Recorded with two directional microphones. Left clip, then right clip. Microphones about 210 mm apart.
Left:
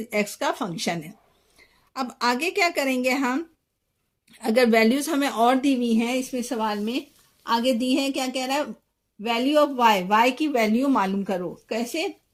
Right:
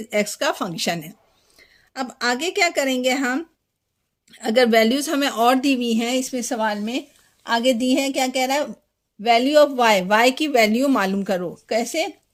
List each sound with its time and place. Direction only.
0.0 s a woman's voice: 30° right (ahead or behind); by 12.0 s 55° right (ahead or behind)